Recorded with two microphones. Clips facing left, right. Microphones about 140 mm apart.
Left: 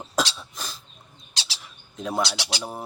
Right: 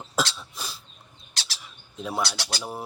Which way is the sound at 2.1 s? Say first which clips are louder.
Left 3 dB; 15° left (ahead or behind).